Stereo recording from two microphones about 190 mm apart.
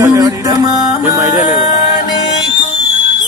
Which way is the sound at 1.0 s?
10° right (ahead or behind).